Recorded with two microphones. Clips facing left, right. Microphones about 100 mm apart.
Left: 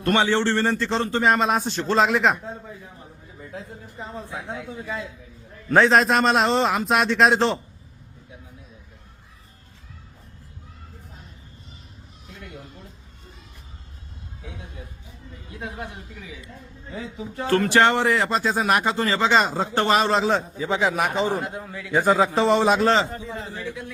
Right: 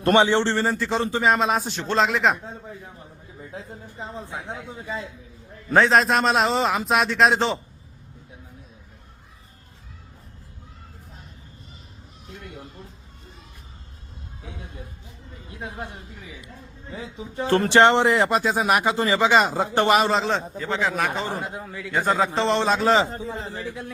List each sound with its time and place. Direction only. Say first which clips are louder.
0.0 s speech: right 2 dB; 25° right (ahead or behind)
0.6 s a man's voice: even; 5° right (ahead or behind)
3.7 s speech: even; 20° right (ahead or behind)
5.6 s a man's voice: left 1 dB; centre (ahead or behind)
17.2 s speech: even; 25° right (ahead or behind)
20.0 s a man's voice: left 1 dB; centre (ahead or behind)
20.6 s a man's voice: left 2 dB; 15° left (ahead or behind)
21.4 s a man's voice: even; centre (ahead or behind)
22.8 s a man's voice: even; 5° right (ahead or behind)
23.0 s a man's voice: right 1 dB; 35° right (ahead or behind)